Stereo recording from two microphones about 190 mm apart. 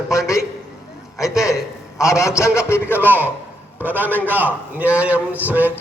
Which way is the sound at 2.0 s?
15° left (ahead or behind).